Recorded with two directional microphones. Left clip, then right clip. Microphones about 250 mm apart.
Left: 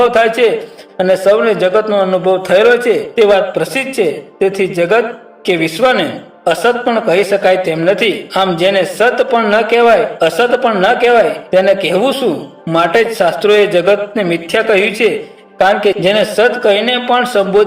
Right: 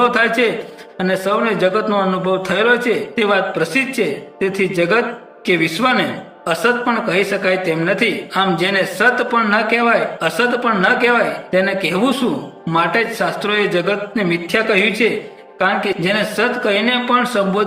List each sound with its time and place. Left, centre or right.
0.0 s a man's voice: centre